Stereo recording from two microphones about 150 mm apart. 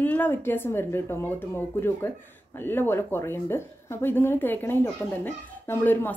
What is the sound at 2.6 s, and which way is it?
Speech, 15° left (ahead or behind).